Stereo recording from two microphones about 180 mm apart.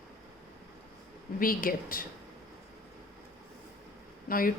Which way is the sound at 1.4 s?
50° left (ahead or behind).